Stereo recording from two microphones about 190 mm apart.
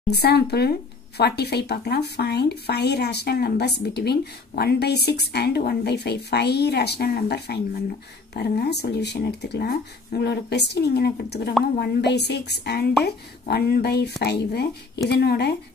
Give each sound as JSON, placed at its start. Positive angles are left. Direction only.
{"t": 0.1, "sound": "speech", "side_deg": 60}